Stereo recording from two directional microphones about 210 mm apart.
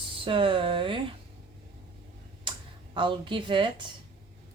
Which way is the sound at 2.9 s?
25° right (ahead or behind).